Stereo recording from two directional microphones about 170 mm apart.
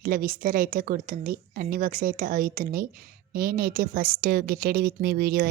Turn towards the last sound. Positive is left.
turn(degrees=-60)  # may be behind; listen again after turning